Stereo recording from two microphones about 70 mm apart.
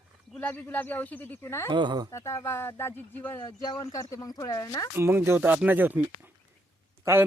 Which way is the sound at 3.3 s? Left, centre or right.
Left.